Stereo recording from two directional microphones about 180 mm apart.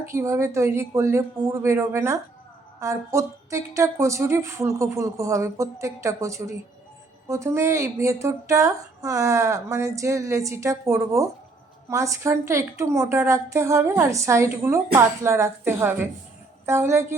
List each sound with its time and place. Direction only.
0.1 s a woman's voice: 15° right (ahead or behind)